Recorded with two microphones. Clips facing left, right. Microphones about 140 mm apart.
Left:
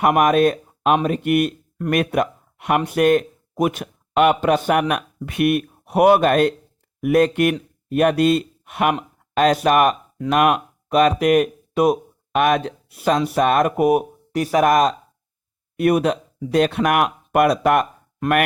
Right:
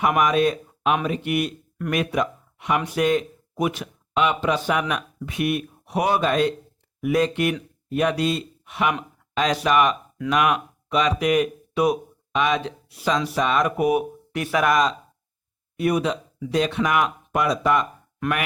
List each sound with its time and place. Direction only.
0.0 s speech: 55° left (ahead or behind)